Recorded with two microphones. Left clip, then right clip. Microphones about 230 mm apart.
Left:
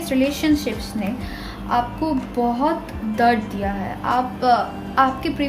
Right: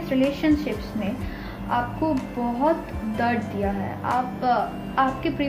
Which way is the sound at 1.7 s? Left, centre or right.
Left.